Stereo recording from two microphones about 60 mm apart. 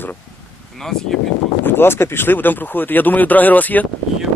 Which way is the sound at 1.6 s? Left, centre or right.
Left.